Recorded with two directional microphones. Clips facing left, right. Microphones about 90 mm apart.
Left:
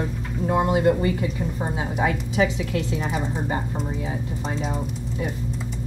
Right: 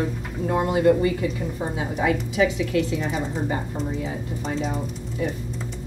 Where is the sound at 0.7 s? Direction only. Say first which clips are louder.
Right 5 dB; 30° left (ahead or behind).